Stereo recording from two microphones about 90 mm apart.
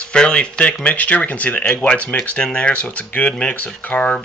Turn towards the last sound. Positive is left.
turn(degrees=15)  # may be behind; listen again after turning